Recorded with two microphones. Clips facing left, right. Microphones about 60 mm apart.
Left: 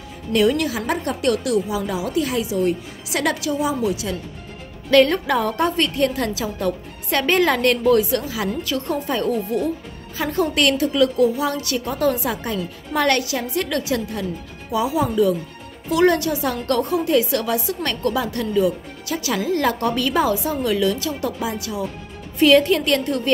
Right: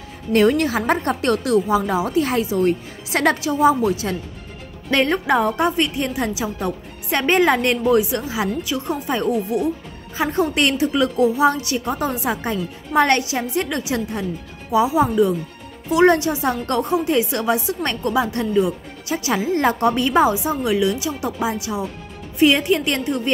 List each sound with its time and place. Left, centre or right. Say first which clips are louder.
0.3 s a woman's voice: right 2 dB; right
4.9 s a woman's voice: left 2 dB; right